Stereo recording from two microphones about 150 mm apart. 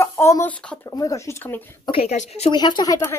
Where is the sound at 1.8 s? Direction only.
40° left (ahead or behind).